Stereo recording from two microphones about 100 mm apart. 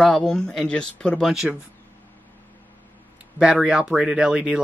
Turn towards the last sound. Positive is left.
turn(degrees=-10)  # may be behind; listen again after turning